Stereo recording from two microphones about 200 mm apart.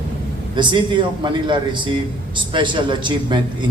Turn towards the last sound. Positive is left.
turn(degrees=-25)  # may be behind; listen again after turning